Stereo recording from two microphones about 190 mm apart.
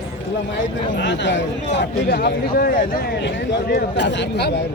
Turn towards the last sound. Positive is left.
turn(degrees=65)  # may be behind; listen again after turning